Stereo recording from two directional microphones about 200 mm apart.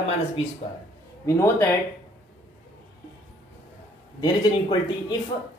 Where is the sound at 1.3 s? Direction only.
15° left (ahead or behind).